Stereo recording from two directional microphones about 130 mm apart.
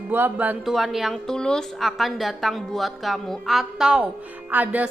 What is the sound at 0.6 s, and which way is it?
A woman's voice, centre (ahead or behind).